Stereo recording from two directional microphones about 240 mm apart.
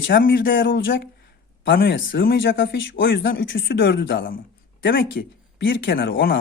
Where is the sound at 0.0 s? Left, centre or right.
Left.